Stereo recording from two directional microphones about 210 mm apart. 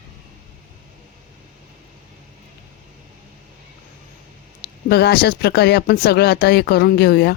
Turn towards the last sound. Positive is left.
turn(degrees=50)  # may be behind; listen again after turning